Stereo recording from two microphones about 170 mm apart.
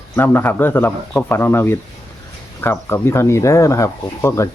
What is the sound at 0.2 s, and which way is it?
Speech, 10° left (ahead or behind).